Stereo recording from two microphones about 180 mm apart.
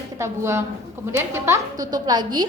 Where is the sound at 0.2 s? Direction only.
15° right (ahead or behind).